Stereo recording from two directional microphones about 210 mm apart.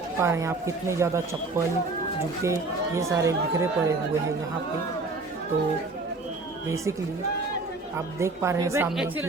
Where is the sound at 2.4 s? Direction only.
15° right (ahead or behind).